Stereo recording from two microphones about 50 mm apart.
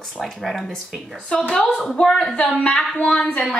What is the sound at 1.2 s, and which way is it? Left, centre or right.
Speech, left.